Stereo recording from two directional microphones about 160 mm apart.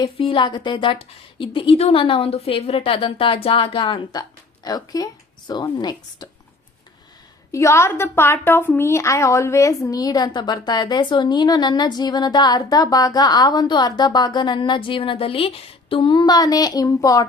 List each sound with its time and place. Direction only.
0.0 s a woman's voice: 30° left (ahead or behind)
7.5 s a woman's voice: 20° left (ahead or behind)